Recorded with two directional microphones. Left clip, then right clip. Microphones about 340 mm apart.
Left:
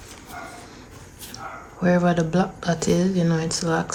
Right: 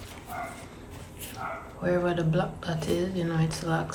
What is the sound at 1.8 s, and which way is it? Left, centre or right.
Speech, centre.